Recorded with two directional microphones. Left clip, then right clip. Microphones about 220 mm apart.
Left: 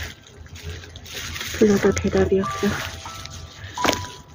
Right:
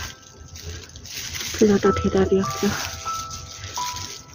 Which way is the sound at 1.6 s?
10° right (ahead or behind).